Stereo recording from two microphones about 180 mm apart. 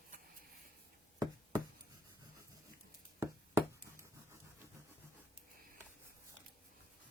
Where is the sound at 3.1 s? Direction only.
10° right (ahead or behind).